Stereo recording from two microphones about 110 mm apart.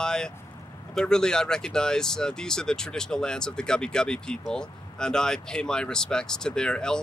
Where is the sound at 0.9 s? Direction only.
5° left (ahead or behind).